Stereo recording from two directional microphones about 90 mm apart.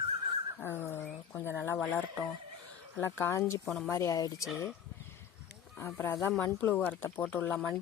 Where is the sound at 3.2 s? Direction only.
30° left (ahead or behind).